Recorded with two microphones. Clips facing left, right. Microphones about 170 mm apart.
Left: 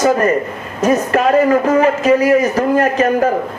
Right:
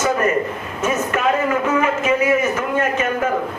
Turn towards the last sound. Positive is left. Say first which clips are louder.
# left 6 dB
turn(degrees=35)  # may be behind; listen again after turning